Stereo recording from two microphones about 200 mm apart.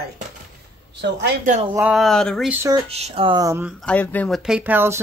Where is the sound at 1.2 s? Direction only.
40° right (ahead or behind).